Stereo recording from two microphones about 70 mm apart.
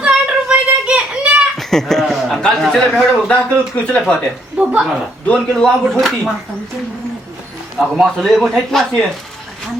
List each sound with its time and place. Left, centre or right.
0.1 s child singing: centre
1.5 s chuckle: centre
2.4 s a man's voice: centre
3.0 s speech: centre
4.5 s a woman's voice: centre
5.3 s a man's voice: centre
6.0 s a man's voice: centre
7.8 s a man's voice: centre